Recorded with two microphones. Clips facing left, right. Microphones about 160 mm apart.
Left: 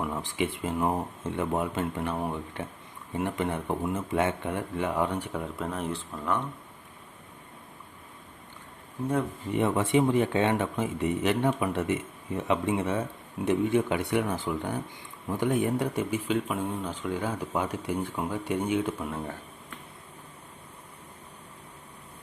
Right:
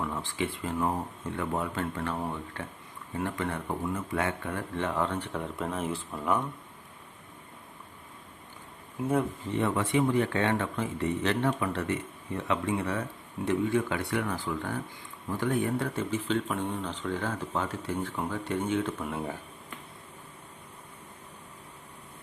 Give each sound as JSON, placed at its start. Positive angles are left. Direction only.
{"t": 0.0, "sound": "speech", "side_deg": 15}
{"t": 9.5, "sound": "speech", "side_deg": 20}